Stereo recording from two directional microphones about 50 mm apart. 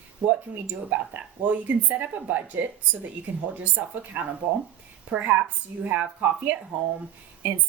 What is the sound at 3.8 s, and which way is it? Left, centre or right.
A woman's voice, right.